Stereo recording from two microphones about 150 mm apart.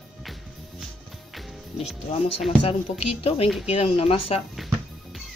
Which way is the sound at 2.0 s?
40° left (ahead or behind).